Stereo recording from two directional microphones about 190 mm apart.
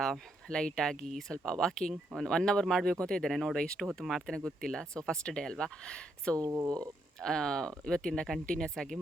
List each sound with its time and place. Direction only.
0.0 s speech: 5° left (ahead or behind)
6.3 s speech: 15° right (ahead or behind)
7.2 s speech: 5° left (ahead or behind)